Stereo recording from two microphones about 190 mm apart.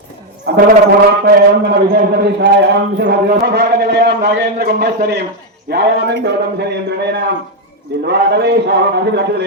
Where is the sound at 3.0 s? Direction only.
60° right (ahead or behind).